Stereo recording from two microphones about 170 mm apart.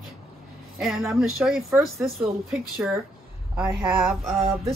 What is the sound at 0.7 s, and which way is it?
Speech, centre (ahead or behind).